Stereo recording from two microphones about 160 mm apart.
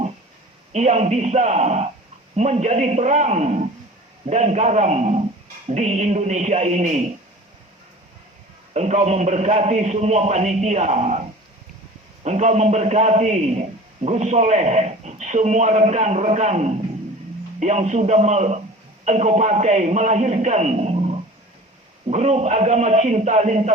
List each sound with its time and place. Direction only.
0.7 s a man's voice: 45° right (ahead or behind)
8.7 s a man's voice: 45° right (ahead or behind)
12.2 s a man's voice: 45° right (ahead or behind)